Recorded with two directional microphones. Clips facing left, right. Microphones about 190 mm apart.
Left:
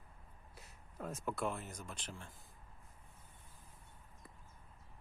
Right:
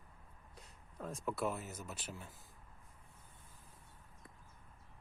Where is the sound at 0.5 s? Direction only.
5° left (ahead or behind).